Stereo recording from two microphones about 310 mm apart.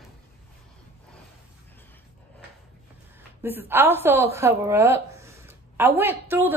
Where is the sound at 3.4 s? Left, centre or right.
Centre.